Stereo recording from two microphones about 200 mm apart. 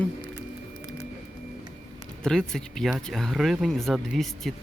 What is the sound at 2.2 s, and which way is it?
Speech, 5° left (ahead or behind).